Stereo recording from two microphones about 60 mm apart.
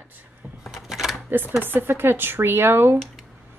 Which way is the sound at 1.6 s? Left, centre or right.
Right.